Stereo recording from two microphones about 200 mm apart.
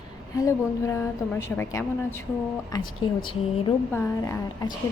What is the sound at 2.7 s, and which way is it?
A woman's voice, 20° left (ahead or behind).